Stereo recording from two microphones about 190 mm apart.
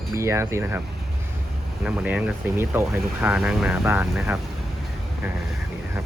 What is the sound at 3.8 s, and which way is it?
Speech, 15° right (ahead or behind).